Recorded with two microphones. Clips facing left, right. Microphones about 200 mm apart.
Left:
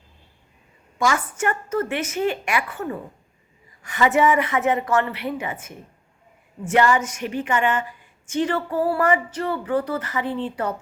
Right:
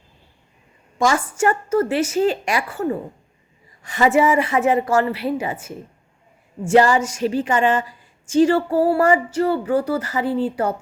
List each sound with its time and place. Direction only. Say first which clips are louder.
0.9 s a woman's voice: right 4 dB; 30° right (ahead or behind)